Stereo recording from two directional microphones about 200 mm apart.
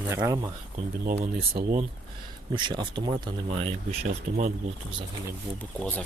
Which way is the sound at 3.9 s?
40° right (ahead or behind).